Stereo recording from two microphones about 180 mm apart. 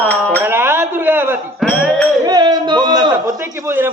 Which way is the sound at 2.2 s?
20° right (ahead or behind).